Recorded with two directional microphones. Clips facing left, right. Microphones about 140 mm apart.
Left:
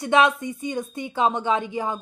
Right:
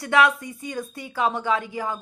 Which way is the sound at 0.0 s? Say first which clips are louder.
Left 1 dB; 20° left (ahead or behind).